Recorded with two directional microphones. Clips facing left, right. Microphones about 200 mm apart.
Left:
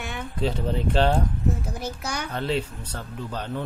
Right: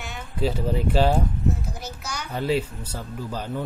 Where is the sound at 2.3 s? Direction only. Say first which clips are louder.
Right 3 dB; 10° right (ahead or behind).